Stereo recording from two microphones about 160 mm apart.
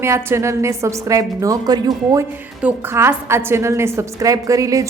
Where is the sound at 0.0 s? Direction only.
15° right (ahead or behind).